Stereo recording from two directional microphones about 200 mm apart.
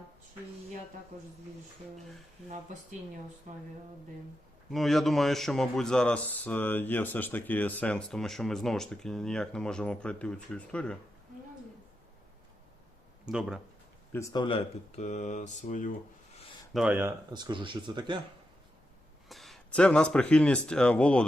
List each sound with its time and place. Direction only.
3.5 s speech: 40° right (ahead or behind)
4.7 s speech: centre (ahead or behind)
13.3 s speech: 5° right (ahead or behind)
14.1 s speech: 15° left (ahead or behind); by 16.4 s 40° left (ahead or behind)
16.7 s speech: 10° right (ahead or behind); by 18.2 s 25° right (ahead or behind)
19.3 s speech: centre (ahead or behind)